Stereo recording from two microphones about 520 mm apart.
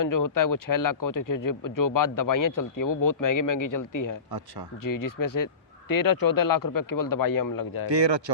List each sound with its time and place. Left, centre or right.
0.0 s speech: left
4.3 s speech: right
4.8 s speech: left